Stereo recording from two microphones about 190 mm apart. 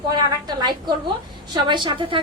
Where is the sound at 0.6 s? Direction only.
20° right (ahead or behind).